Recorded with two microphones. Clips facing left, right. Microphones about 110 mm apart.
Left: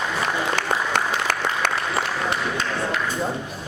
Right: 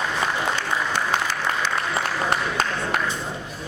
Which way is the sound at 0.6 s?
60° left (ahead or behind).